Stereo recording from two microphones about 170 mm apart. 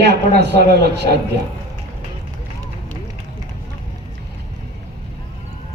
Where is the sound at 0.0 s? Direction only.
80° right.